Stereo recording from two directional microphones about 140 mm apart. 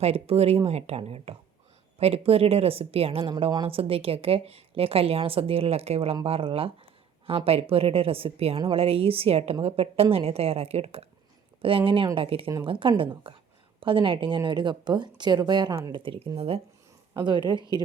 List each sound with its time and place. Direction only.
0.0 s a woman's voice: 45° right (ahead or behind); by 16.0 s 25° right (ahead or behind)
16.0 s speech: 40° right (ahead or behind)
17.2 s speech: 35° right (ahead or behind)